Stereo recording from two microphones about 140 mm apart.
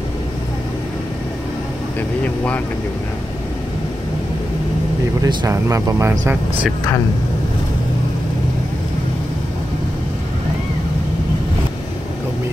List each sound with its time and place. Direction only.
2.0 s speech: 10° left (ahead or behind)
5.2 s speech: 25° right (ahead or behind)